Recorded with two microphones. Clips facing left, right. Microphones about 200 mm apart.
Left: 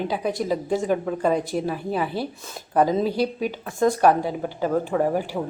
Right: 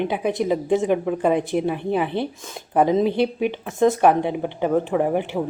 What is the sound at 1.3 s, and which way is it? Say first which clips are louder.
Speech: right 3 dB; 20° right (ahead or behind).